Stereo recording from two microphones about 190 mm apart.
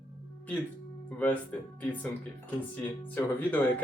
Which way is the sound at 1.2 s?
10° left (ahead or behind).